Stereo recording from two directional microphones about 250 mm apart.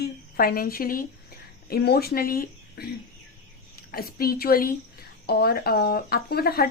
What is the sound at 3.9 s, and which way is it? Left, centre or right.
A woman's voice, left.